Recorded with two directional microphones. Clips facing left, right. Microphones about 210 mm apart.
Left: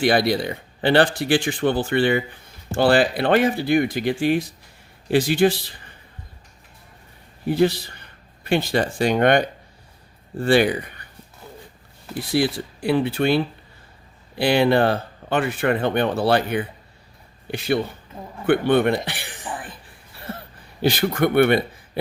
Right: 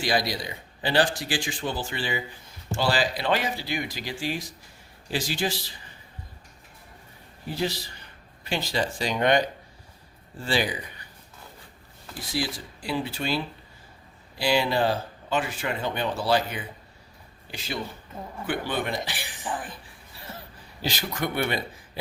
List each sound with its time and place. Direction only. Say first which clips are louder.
0.0 s speech: left 8 dB; 60° left (ahead or behind)
7.4 s speech: left 10 dB; 60° left (ahead or behind)
12.1 s speech: left 9 dB; 60° left (ahead or behind)
19.4 s speech: right 4 dB; 5° left (ahead or behind)
20.1 s a sound: left 8 dB; 60° left (ahead or behind)
20.8 s speech: left 10 dB; 55° left (ahead or behind)